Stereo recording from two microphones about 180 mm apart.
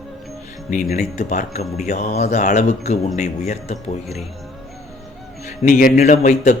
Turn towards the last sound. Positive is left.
turn(degrees=45)  # may be behind; listen again after turning